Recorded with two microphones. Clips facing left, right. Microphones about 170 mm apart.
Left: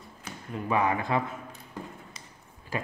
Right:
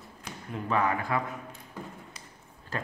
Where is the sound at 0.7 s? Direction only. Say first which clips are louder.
Left 2 dB; 15° left (ahead or behind).